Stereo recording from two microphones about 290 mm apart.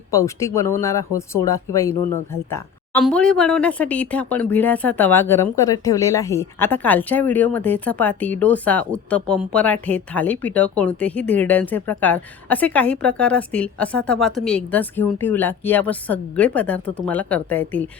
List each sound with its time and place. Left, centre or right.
0.1 s speech: centre